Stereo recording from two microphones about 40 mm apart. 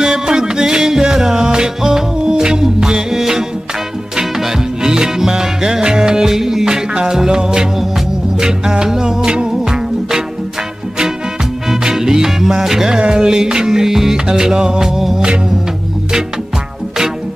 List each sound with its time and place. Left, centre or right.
0.0 s music: centre
11.7 s music: centre